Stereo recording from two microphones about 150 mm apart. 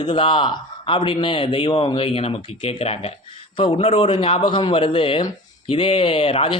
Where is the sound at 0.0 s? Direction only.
35° left (ahead or behind).